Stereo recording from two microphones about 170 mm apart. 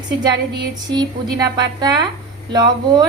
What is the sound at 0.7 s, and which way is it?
Speech, 25° right (ahead or behind).